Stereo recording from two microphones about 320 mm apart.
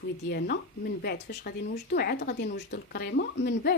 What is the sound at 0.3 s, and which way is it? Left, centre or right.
Speech, left.